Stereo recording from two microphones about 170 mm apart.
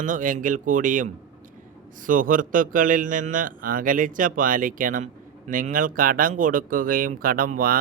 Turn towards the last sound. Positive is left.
turn(degrees=-55)  # may be behind; listen again after turning